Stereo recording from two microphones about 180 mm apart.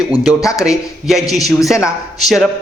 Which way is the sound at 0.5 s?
5° right (ahead or behind).